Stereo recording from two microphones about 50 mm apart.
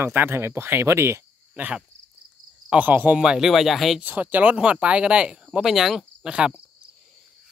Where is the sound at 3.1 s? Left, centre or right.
Centre.